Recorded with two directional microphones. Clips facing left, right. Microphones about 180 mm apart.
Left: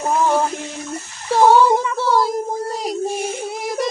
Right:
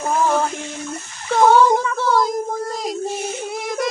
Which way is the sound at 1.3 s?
10° left (ahead or behind).